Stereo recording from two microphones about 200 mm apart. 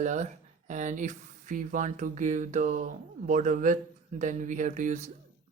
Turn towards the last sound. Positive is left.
turn(degrees=-35)  # may be behind; listen again after turning